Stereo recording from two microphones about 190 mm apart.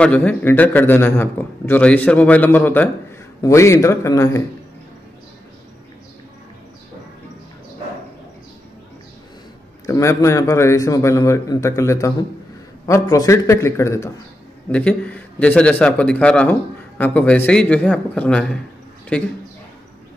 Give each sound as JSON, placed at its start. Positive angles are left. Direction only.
{"t": 0.0, "sound": "a man's voice", "side_deg": 5}
{"t": 9.8, "sound": "a man's voice", "side_deg": 15}